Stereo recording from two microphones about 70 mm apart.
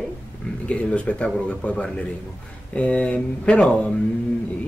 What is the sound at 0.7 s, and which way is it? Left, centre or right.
A man's voice, centre.